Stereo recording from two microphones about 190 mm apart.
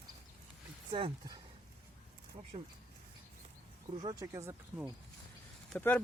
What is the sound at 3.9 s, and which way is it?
Speech, 20° right (ahead or behind).